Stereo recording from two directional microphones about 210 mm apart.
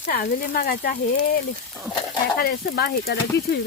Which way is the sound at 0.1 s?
40° left (ahead or behind).